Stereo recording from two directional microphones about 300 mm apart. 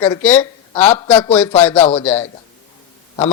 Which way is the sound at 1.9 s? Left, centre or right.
Centre.